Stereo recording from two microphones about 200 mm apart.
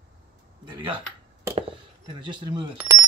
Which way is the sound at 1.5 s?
25° right (ahead or behind).